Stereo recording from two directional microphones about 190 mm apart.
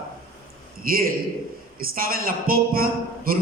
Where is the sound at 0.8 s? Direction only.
50° right (ahead or behind).